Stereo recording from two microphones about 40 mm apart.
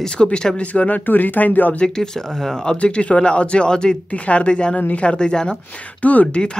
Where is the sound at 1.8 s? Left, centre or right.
Centre.